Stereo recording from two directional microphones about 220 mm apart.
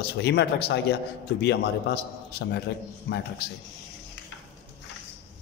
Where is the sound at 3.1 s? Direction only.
45° left (ahead or behind).